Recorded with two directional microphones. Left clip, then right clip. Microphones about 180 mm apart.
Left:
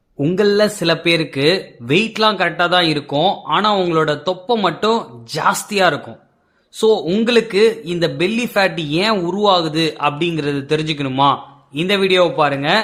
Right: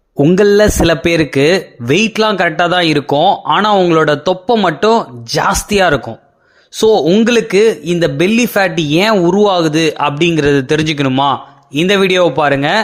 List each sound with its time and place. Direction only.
0.3 s speech: 45° right (ahead or behind)